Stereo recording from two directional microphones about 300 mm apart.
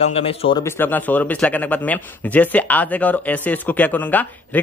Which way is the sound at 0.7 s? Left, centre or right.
Centre.